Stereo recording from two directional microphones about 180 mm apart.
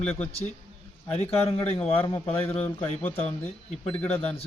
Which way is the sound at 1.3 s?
35° left (ahead or behind).